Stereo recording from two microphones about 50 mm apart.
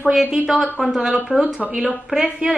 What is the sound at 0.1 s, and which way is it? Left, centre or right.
A woman's voice, centre.